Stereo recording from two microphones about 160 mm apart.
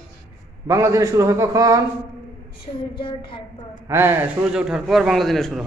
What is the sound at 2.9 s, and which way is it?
Speech, 35° left (ahead or behind).